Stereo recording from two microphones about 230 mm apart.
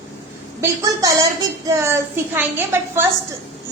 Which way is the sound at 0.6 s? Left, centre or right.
Centre.